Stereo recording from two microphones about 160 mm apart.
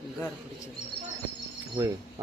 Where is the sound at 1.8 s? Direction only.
15° right (ahead or behind).